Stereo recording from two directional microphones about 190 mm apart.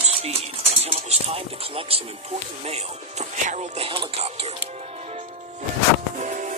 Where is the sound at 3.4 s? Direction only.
35° right (ahead or behind).